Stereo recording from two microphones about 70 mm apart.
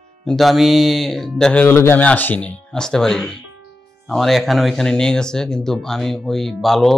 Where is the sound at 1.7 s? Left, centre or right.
Left.